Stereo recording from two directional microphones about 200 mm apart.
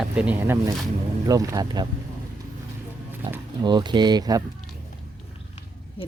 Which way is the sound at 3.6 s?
20° right (ahead or behind).